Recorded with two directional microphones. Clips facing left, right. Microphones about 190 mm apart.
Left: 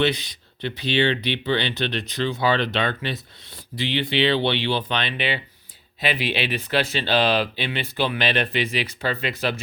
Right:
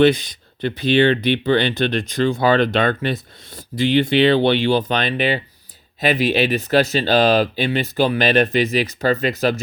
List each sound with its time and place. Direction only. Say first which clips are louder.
0.0 s speech: right 8 dB; 45° right (ahead or behind)